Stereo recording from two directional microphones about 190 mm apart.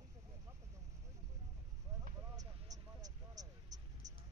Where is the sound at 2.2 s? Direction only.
20° right (ahead or behind).